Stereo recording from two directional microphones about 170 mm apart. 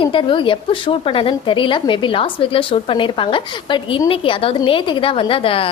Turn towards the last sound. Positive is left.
turn(degrees=30)  # may be behind; listen again after turning